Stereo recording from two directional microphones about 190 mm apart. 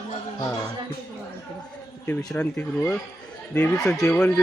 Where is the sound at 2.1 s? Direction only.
15° left (ahead or behind).